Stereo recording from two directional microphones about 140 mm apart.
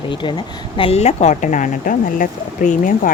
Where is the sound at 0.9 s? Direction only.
50° left (ahead or behind).